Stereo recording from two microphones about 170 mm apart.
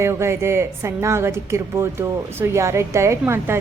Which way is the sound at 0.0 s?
15° right (ahead or behind).